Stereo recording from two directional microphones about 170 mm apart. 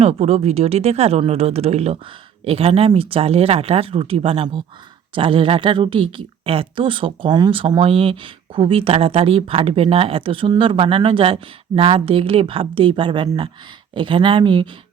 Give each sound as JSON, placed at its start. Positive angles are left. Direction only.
{"t": 0.0, "sound": "a woman's voice", "side_deg": -35}